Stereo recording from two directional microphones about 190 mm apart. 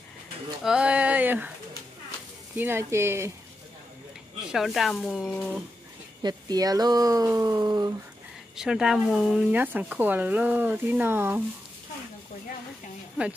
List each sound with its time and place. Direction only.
0.7 s speech: 5° right (ahead or behind)
2.5 s speech: 10° right (ahead or behind)
4.5 s speech: centre (ahead or behind)
6.2 s speech: 20° right (ahead or behind)
8.5 s speech: 5° right (ahead or behind)